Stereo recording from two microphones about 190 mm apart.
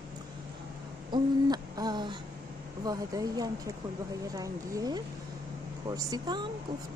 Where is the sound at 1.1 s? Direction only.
20° right (ahead or behind).